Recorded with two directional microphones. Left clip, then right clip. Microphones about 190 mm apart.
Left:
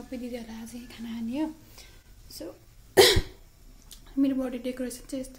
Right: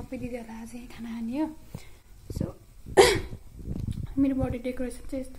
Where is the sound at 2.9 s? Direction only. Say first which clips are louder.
Even; 30° left (ahead or behind).